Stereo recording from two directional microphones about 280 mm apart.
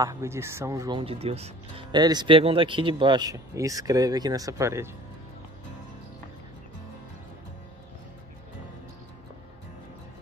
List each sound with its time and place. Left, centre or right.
0.0 s speech: centre